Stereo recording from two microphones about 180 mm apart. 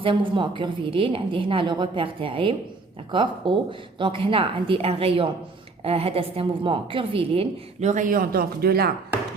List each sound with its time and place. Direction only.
0.0 s a woman's voice: 25° right (ahead or behind); by 8.9 s 60° right (ahead or behind)